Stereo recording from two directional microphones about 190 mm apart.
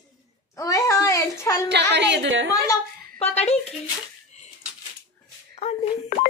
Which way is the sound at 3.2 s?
35° left (ahead or behind).